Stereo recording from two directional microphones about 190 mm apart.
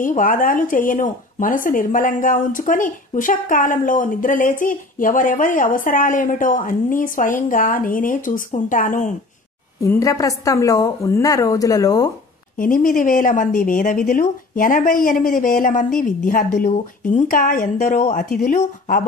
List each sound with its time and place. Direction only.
0.0 s speech: 45° left (ahead or behind)
9.8 s speech: 15° left (ahead or behind)
12.5 s speech: 45° left (ahead or behind)